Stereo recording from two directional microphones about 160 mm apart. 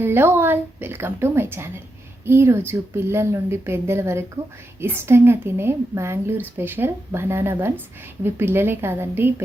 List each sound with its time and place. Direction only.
0.0 s a woman's voice: 15° right (ahead or behind)